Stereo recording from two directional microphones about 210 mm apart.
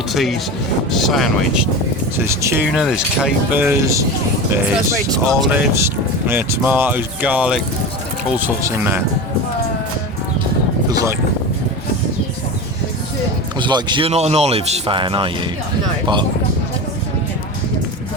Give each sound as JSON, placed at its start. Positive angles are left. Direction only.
{"t": 0.1, "sound": "speech", "side_deg": 0}
{"t": 2.1, "sound": "speech", "side_deg": -10}
{"t": 2.7, "sound": "speech", "side_deg": 0}
{"t": 10.8, "sound": "boat", "side_deg": -20}
{"t": 13.6, "sound": "speech", "side_deg": -20}